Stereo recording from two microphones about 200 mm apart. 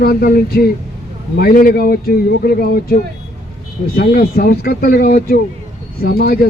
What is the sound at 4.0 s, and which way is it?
A man's voice, 45° left (ahead or behind).